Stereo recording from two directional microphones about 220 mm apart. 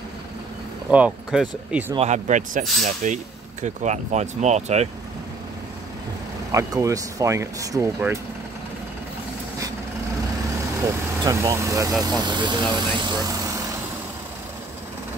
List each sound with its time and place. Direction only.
0.8 s speech: 5° right (ahead or behind)
2.0 s speech: 35° right (ahead or behind)
6.5 s speech: 15° right (ahead or behind)
11.2 s speech: 15° right (ahead or behind)